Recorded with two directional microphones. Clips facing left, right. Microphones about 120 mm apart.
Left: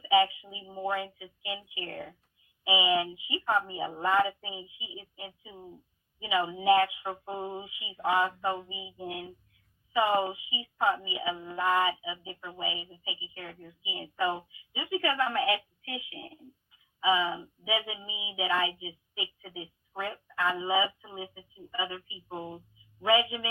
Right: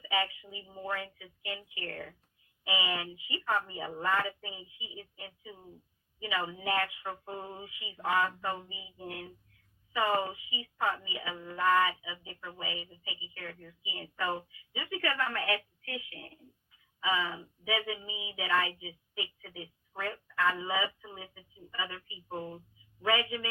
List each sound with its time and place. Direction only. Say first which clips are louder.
0.0 s a woman's voice: left 9 dB; 20° left (ahead or behind)